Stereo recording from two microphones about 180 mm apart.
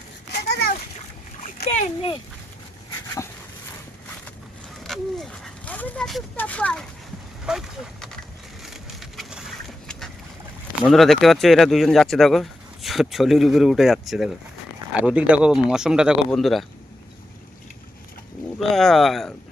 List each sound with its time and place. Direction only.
0.3 s splash: 70° left (ahead or behind)
1.6 s a child's voice: 35° left (ahead or behind)
4.8 s a sound: centre (ahead or behind)
7.5 s speech: 5° right (ahead or behind)
8.6 s wood: centre (ahead or behind)
10.8 s speech: centre (ahead or behind)
18.7 s speech: centre (ahead or behind)